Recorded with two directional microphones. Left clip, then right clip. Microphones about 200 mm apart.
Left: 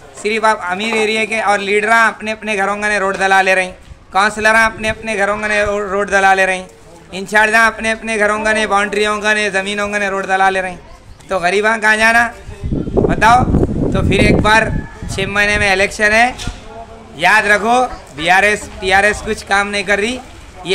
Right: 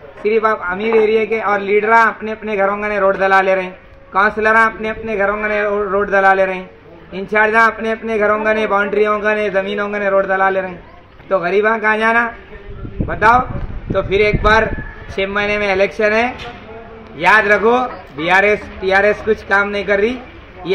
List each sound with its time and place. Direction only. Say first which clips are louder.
0.2 s speech: left 1 dB; 30° left (ahead or behind)